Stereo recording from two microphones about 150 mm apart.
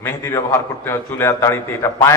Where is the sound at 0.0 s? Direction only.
15° left (ahead or behind).